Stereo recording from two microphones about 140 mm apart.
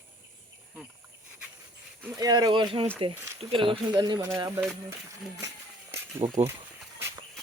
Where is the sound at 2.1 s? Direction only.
25° right (ahead or behind).